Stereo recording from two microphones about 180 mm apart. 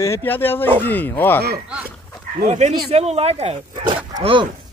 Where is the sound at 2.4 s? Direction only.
40° right (ahead or behind).